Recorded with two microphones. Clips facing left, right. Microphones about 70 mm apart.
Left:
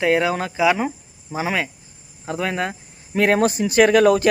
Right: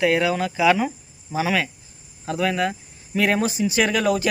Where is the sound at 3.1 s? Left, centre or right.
Left.